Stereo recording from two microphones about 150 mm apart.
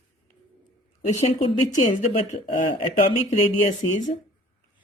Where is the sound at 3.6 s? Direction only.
50° left (ahead or behind).